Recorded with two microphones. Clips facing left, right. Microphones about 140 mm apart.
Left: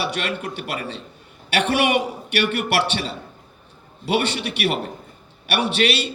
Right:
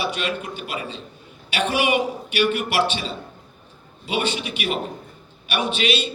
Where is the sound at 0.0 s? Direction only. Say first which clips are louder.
Even; 65° left (ahead or behind).